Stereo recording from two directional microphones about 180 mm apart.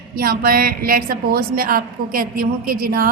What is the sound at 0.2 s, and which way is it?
A woman's voice, 55° right (ahead or behind).